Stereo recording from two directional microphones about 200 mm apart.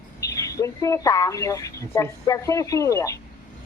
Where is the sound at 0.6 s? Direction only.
15° left (ahead or behind).